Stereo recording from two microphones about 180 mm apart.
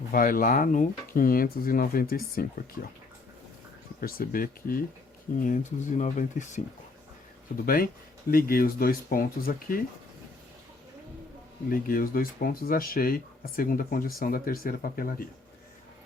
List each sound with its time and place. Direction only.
0.1 s speech: 50° left (ahead or behind)
4.0 s speech: 55° left (ahead or behind)
7.6 s speech: 55° left (ahead or behind)
11.7 s speech: 55° left (ahead or behind)